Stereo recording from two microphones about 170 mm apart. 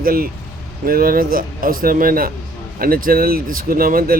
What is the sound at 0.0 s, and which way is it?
Speech, 60° right (ahead or behind).